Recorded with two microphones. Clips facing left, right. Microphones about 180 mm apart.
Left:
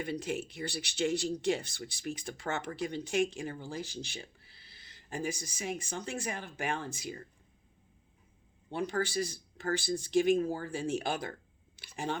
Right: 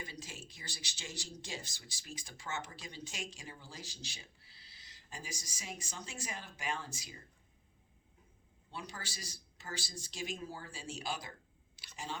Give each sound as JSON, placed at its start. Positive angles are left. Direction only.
{"t": 0.0, "sound": "speech", "side_deg": 60}
{"t": 8.7, "sound": "speech", "side_deg": 55}